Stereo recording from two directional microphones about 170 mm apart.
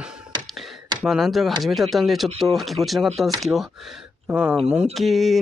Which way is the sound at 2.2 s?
35° right (ahead or behind).